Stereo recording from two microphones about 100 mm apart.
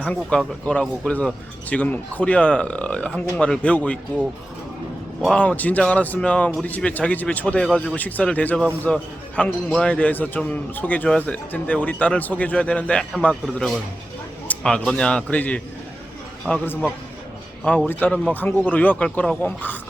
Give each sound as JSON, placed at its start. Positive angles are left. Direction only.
{"t": 0.0, "sound": "a man's voice", "side_deg": 10}
{"t": 5.3, "sound": "a man's voice", "side_deg": 15}